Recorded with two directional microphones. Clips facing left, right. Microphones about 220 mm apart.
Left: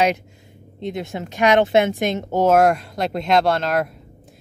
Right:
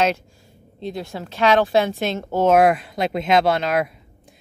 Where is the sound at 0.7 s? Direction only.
20° left (ahead or behind).